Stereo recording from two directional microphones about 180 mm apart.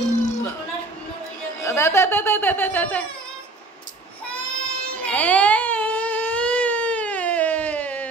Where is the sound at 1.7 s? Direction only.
15° left (ahead or behind).